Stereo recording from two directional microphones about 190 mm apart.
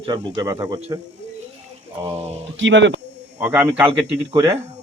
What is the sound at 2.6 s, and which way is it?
Speech, 75° right (ahead or behind).